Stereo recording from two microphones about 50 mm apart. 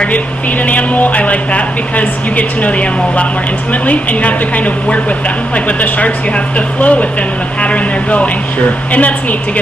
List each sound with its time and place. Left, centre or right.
0.7 s a woman's voice: left